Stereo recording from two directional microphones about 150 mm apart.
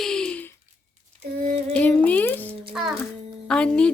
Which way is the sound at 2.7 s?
Centre (ahead or behind).